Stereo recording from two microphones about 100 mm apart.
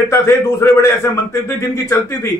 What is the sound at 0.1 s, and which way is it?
Speech, 30° left (ahead or behind).